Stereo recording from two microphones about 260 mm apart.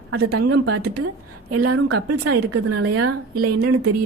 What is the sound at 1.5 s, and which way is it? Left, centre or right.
A woman's voice, right.